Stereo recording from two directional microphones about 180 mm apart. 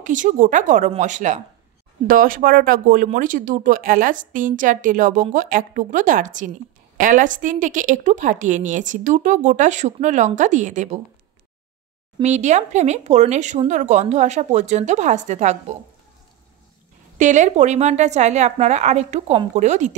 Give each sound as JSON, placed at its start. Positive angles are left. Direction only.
{"t": 0.0, "sound": "speech", "side_deg": -45}
{"t": 12.2, "sound": "speech", "side_deg": -40}
{"t": 17.2, "sound": "speech", "side_deg": -45}